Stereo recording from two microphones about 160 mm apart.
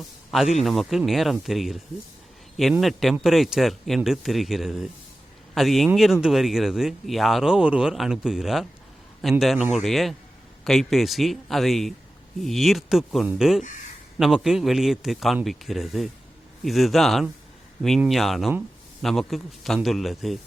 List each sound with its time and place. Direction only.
0.3 s speech: centre (ahead or behind)
2.8 s speech: centre (ahead or behind)